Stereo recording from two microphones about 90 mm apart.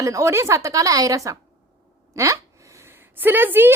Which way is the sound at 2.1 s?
35° right (ahead or behind).